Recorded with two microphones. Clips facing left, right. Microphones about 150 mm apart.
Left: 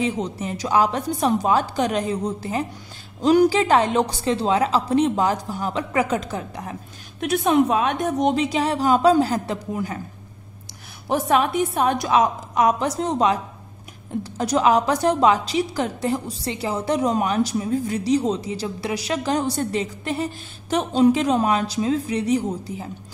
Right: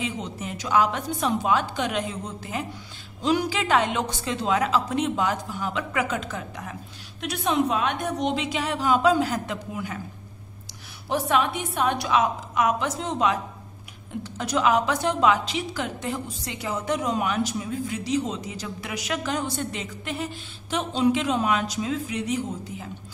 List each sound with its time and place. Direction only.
0.0 s a woman's voice: 35° left (ahead or behind)
7.2 s a woman's voice: 50° left (ahead or behind)
11.1 s a woman's voice: 45° left (ahead or behind)